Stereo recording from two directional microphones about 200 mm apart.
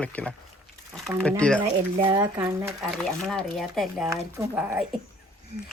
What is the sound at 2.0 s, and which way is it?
Speech, 20° right (ahead or behind).